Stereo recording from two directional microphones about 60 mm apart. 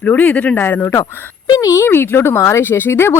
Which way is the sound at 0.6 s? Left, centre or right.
Left.